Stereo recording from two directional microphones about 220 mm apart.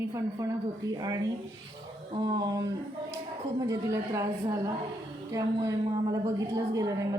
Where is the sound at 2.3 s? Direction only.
15° right (ahead or behind).